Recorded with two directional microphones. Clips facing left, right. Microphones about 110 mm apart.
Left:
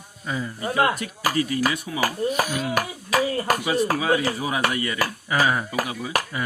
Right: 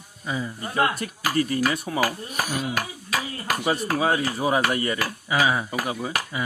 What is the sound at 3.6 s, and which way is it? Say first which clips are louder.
Speech: left 1 dB; 40° right (ahead or behind).